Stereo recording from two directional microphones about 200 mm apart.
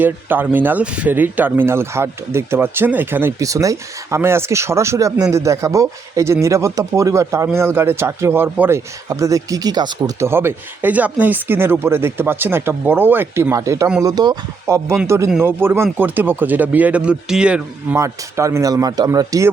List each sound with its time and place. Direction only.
0.0 s speech: 10° right (ahead or behind)